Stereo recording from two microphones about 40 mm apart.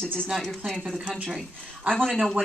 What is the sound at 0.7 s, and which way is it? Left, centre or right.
Speech, centre.